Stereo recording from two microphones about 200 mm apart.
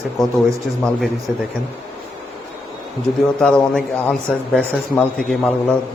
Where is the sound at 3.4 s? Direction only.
5° left (ahead or behind).